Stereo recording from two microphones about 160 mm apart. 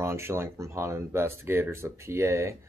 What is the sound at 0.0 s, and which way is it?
Speech, 15° right (ahead or behind).